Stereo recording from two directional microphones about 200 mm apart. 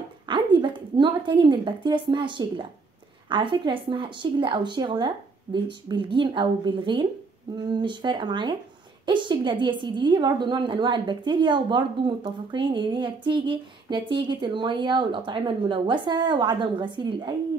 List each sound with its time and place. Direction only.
0.3 s a woman's voice: 25° right (ahead or behind)